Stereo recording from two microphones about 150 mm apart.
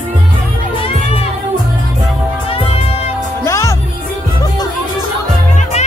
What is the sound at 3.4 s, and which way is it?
Music, 20° left (ahead or behind).